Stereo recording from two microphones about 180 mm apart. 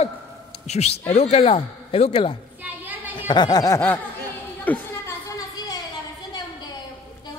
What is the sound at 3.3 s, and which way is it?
Speech, 20° left (ahead or behind).